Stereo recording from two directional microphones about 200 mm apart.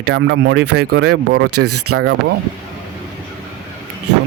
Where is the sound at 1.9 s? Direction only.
90° right.